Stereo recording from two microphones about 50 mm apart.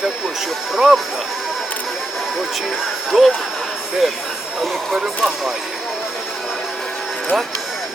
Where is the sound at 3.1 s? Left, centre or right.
Centre.